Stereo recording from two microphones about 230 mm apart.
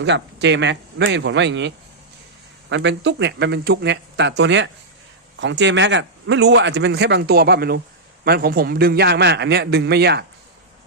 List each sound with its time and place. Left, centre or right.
0.0 s a man's voice: right